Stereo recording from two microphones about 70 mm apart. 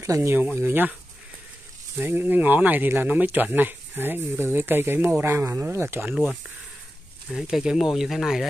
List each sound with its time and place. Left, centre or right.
0.0 s speech: right
0.6 s speech: right
2.0 s speech: right
7.2 s speech: centre